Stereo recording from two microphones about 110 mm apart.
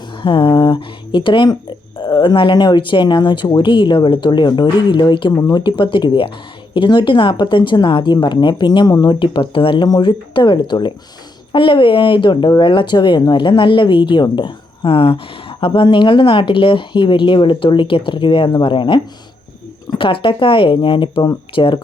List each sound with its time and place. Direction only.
0.2 s speech: 50° left (ahead or behind)